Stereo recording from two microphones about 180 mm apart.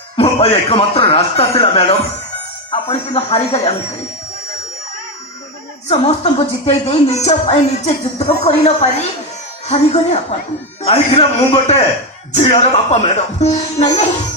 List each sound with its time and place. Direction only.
0.2 s a woman's voice: 35° left (ahead or behind)
5.9 s a woman's voice: 35° left (ahead or behind)